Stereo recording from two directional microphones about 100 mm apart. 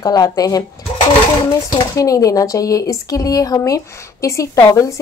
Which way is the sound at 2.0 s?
35° left (ahead or behind).